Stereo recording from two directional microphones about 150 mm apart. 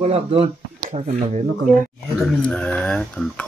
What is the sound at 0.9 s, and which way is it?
Speech, 55° right (ahead or behind).